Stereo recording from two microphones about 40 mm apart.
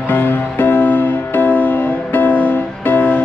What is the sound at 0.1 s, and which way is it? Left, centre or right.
Music, left.